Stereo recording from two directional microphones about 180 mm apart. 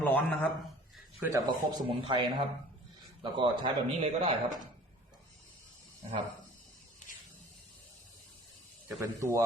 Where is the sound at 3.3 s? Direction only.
25° right (ahead or behind).